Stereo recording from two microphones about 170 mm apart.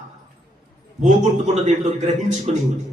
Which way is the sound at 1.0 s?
45° right (ahead or behind).